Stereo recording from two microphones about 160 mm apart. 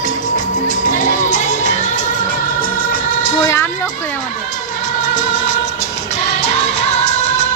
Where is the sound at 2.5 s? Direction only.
60° left (ahead or behind).